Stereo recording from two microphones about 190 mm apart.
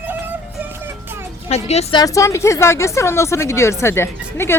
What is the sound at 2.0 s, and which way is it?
Speech, 15° left (ahead or behind).